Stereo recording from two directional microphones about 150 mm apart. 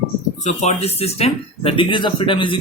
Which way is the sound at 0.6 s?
45° left (ahead or behind).